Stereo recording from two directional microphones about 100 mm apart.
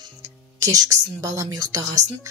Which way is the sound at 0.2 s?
35° right (ahead or behind).